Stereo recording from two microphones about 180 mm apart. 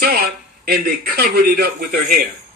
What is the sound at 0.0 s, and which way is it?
Speech, 55° right (ahead or behind).